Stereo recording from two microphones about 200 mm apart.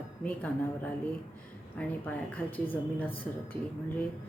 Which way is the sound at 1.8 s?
5° left (ahead or behind).